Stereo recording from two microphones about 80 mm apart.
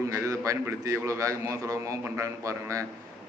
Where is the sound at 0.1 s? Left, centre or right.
Right.